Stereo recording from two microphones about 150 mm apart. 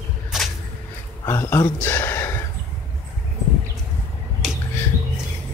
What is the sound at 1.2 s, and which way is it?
Speech, 15° left (ahead or behind).